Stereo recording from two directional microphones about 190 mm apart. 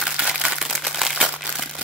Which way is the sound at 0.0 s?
Centre (ahead or behind).